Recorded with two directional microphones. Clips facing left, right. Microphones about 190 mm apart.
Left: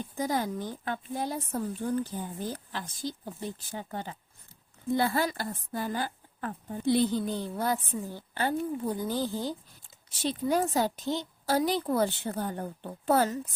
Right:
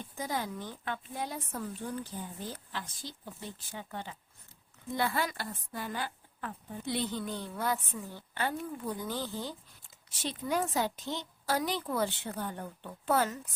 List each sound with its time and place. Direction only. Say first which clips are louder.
0.0 s a woman's voice: left 6 dB; 40° left (ahead or behind)
2.1 s speech: left 5 dB; 60° left (ahead or behind)
2.5 s a woman's voice: left 4 dB; 40° left (ahead or behind)